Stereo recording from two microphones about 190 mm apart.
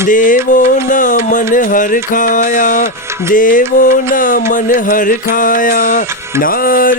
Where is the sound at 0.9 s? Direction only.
45° left (ahead or behind).